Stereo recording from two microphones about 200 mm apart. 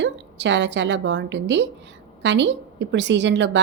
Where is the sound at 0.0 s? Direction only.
65° right (ahead or behind).